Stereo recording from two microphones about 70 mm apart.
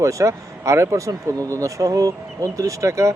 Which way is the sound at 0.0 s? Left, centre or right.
Right.